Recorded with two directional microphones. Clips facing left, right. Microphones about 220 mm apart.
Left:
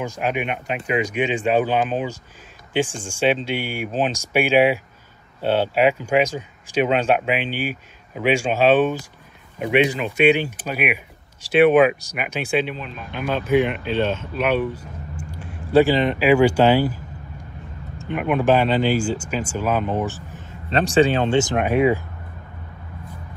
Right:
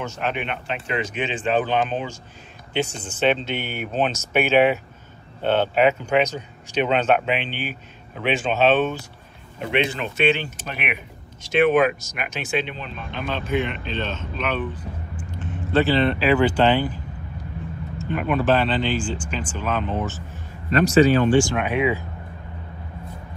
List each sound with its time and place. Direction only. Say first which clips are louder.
0.0 s speech: left 3 dB; 10° left (ahead or behind)
2.8 s speech: left 2 dB; 50° left (ahead or behind)
3.1 s speech: left 1 dB; 10° left (ahead or behind)
20.1 s a sound: left 2 dB; 15° left (ahead or behind)
20.7 s speech: right 1 dB; 30° left (ahead or behind)
21.5 s speech: left 4 dB; 45° left (ahead or behind)